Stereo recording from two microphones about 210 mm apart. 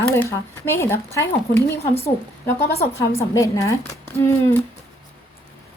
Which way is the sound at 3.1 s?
15° left (ahead or behind).